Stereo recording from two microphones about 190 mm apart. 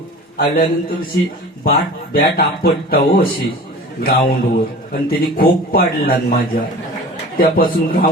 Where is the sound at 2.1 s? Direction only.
55° left (ahead or behind).